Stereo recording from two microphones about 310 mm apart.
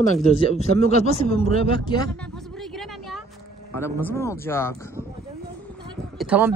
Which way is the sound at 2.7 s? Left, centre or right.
Centre.